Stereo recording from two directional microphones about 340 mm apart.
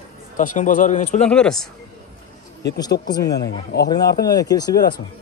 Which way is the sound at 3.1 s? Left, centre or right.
Centre.